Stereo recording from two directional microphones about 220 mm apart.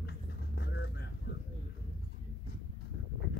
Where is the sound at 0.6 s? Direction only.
55° left (ahead or behind).